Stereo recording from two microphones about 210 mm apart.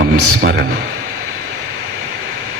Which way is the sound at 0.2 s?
75° right (ahead or behind).